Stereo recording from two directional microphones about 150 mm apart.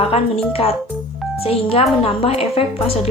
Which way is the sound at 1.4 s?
40° left (ahead or behind).